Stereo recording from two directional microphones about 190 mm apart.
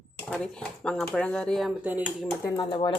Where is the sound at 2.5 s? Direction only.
25° left (ahead or behind).